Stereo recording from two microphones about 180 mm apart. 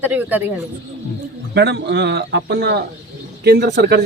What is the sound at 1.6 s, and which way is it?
Speech, 70° right (ahead or behind).